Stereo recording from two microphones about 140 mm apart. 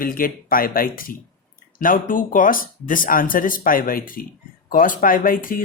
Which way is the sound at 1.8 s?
75° left (ahead or behind).